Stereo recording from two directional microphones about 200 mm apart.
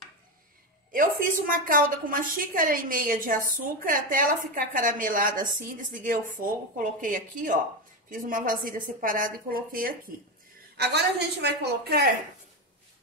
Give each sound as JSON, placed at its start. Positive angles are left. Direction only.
{"t": 0.9, "sound": "a woman's voice", "side_deg": -45}
{"t": 10.8, "sound": "a woman's voice", "side_deg": -55}